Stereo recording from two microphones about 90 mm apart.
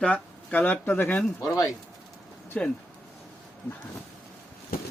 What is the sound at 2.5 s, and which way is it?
Speech, 15° left (ahead or behind).